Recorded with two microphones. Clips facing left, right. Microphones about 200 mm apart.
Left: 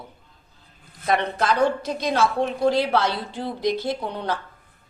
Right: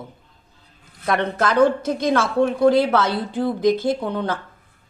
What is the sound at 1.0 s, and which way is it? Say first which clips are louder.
Speech: right 1 dB; 55° right (ahead or behind).